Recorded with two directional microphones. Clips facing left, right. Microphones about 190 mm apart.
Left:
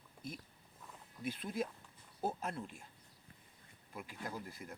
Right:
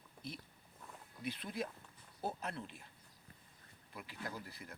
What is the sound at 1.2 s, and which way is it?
Speech, 45° left (ahead or behind).